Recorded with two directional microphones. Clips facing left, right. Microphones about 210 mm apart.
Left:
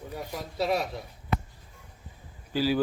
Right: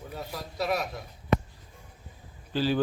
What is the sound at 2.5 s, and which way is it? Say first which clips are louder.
Speech: left 1 dB; 10° left (ahead or behind).